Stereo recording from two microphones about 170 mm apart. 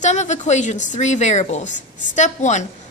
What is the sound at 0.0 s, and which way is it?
A woman's voice, 45° left (ahead or behind).